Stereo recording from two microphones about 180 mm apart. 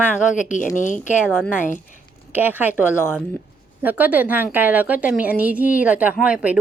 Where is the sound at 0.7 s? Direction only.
45° left (ahead or behind).